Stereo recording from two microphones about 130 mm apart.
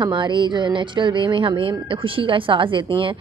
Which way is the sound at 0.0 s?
35° right (ahead or behind).